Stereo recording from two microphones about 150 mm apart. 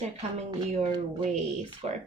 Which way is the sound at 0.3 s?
45° right (ahead or behind).